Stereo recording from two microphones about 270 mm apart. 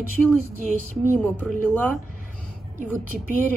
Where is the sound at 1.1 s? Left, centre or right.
Centre.